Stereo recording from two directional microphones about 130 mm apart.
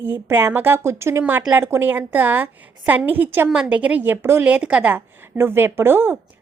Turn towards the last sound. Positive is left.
turn(degrees=-15)  # may be behind; listen again after turning